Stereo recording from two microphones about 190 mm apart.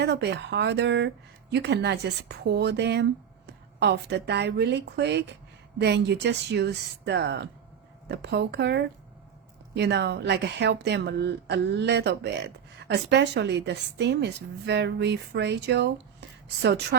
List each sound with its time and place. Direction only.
0.0 s a woman's voice: 65° right (ahead or behind)